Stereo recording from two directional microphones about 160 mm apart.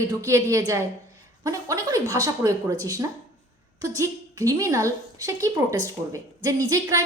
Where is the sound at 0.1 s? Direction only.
20° right (ahead or behind).